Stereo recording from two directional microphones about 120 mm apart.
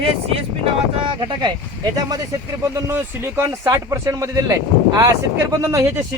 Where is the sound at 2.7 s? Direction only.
20° right (ahead or behind).